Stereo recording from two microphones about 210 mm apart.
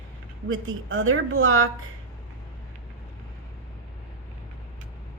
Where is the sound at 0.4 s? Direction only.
65° right (ahead or behind).